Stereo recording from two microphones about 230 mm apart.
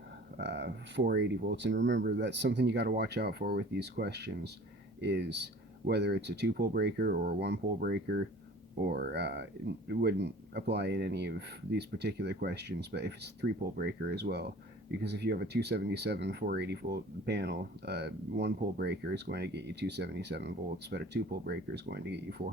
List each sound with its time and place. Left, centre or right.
0.3 s speech: right